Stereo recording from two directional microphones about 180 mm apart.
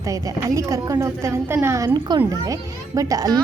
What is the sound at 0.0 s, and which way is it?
A woman's voice, 20° right (ahead or behind).